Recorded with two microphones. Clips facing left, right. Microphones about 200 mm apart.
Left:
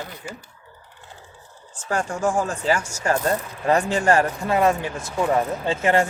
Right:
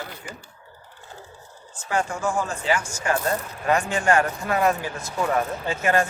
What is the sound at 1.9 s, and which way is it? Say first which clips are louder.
Speech: left 2 dB; 45° left (ahead or behind).